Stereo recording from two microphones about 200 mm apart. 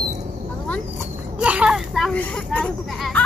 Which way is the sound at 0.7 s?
5° left (ahead or behind).